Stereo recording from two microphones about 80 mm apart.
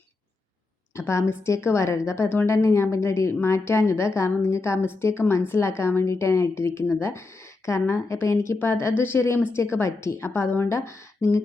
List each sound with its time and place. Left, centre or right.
0.9 s a woman's voice: left